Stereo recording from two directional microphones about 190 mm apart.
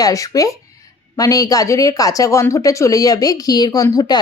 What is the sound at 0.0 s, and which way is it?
Speech, 15° left (ahead or behind).